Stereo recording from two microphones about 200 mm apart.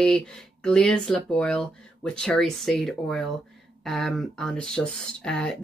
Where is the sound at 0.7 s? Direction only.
5° left (ahead or behind).